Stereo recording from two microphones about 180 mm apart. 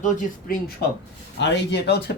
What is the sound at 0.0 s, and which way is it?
Speech, 50° left (ahead or behind).